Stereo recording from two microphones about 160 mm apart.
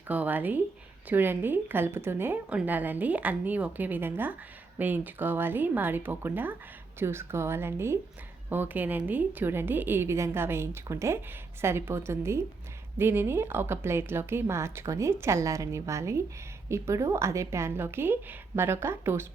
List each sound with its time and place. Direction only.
0.1 s a woman's voice: 10° right (ahead or behind)